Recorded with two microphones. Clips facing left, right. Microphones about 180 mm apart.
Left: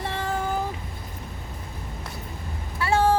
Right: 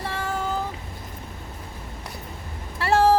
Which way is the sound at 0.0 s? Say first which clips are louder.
Left 1 dB; 20° left (ahead or behind).